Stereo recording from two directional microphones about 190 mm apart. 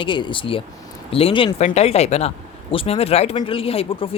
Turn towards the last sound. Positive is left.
turn(degrees=30)  # may be behind; listen again after turning